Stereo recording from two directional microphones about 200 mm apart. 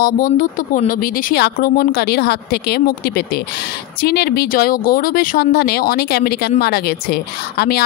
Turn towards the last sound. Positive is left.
turn(degrees=50)  # may be behind; listen again after turning